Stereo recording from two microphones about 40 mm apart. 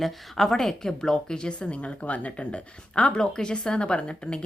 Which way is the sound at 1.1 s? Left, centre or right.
Left.